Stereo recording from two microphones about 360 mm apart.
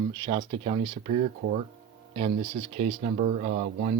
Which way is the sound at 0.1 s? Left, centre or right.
Centre.